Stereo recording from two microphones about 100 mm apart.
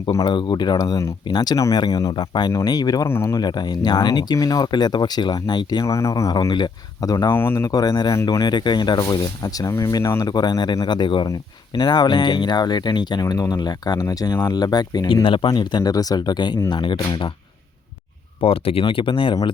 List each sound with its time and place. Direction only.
0.3 s speech: 50° left (ahead or behind)
2.1 s speech: 50° left (ahead or behind)
3.1 s speech: 25° left (ahead or behind)
3.3 s speech: 45° left (ahead or behind)
5.8 s speech: 30° left (ahead or behind)
6.3 s speech: 45° left (ahead or behind)
7.3 s speech: 25° left (ahead or behind)
7.7 s speech: 40° left (ahead or behind)
8.4 s speech: 45° left (ahead or behind); by 10.2 s 30° left (ahead or behind)
10.2 s speech: 45° left (ahead or behind)
15.1 s speech: 60° left (ahead or behind)
18.3 s speech: 70° left (ahead or behind)